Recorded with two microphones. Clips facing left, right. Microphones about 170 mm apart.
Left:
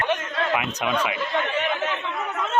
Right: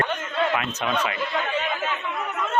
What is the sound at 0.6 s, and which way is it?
Speech, 10° left (ahead or behind).